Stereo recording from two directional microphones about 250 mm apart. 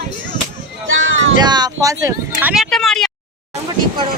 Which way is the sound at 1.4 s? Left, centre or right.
Centre.